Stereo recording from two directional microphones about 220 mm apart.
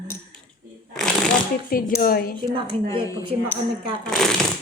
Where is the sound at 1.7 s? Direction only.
40° left (ahead or behind).